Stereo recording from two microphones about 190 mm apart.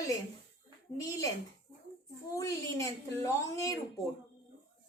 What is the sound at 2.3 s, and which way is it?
A woman's voice, 15° left (ahead or behind).